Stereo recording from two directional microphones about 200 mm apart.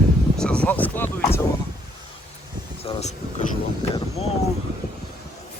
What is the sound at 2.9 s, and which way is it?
Speech, 30° left (ahead or behind).